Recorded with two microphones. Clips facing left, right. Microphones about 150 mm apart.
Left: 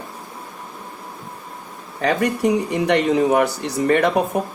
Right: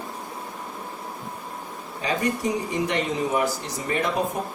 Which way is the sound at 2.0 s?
65° left (ahead or behind).